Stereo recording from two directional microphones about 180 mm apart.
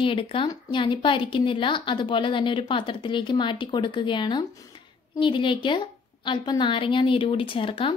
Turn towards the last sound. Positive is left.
turn(degrees=30)  # may be behind; listen again after turning